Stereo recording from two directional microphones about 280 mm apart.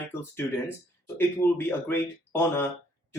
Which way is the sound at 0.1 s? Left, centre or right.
Centre.